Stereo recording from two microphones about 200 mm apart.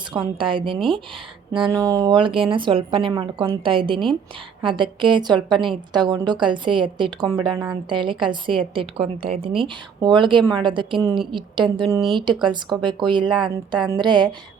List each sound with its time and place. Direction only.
0.1 s a woman's voice: 25° right (ahead or behind)